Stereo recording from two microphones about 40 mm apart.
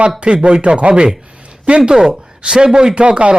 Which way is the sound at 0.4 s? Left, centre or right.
Right.